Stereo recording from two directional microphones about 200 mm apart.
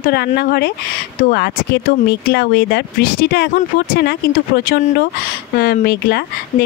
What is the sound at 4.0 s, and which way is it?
Speech, 55° left (ahead or behind).